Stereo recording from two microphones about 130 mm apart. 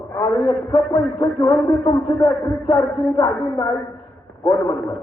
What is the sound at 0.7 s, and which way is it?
Music, 35° left (ahead or behind).